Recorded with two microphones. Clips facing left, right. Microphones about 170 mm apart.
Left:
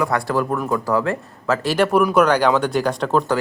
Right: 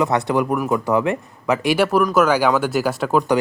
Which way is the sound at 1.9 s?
Centre (ahead or behind).